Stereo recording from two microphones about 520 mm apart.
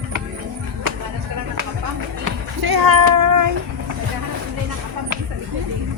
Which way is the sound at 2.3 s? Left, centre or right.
Right.